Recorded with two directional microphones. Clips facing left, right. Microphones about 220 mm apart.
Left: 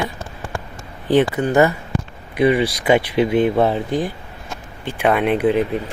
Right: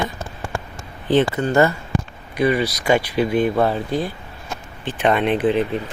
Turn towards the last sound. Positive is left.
turn(degrees=10)  # may be behind; listen again after turning